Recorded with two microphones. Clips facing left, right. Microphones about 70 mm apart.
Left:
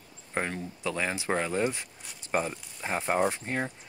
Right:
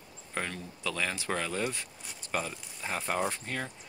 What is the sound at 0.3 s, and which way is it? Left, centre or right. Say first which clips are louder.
Speech: left 4 dB; left.